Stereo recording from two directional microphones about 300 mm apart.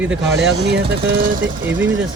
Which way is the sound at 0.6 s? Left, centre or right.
Right.